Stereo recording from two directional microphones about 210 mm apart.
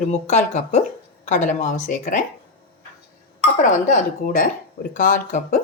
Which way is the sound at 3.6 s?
35° left (ahead or behind).